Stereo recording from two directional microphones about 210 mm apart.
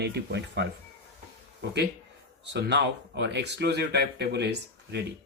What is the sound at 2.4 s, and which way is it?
Speech, 55° right (ahead or behind).